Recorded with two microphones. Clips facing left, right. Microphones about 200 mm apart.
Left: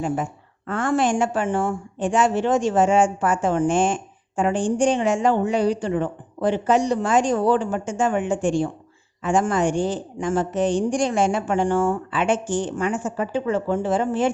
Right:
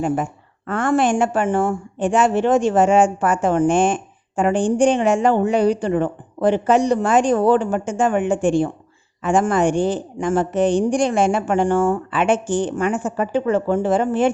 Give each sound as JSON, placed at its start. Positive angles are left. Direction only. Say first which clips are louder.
{"t": 0.7, "sound": "a woman's voice", "louder": "right 3 dB", "side_deg": -60}